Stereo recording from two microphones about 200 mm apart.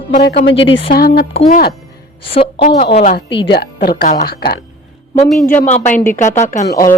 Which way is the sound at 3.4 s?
55° left (ahead or behind).